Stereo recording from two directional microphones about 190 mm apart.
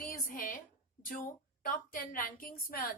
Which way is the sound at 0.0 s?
45° left (ahead or behind).